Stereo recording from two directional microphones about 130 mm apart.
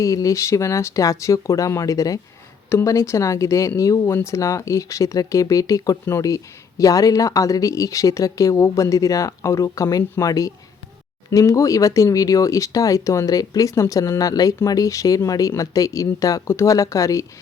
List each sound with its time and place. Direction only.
0.0 s speech: 25° left (ahead or behind)